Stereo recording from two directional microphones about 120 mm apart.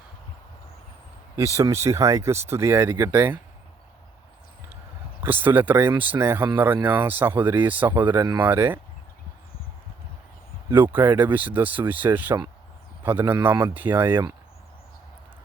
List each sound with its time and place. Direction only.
1.5 s speech: 25° right (ahead or behind)
5.2 s speech: 15° right (ahead or behind)
10.7 s speech: 15° right (ahead or behind)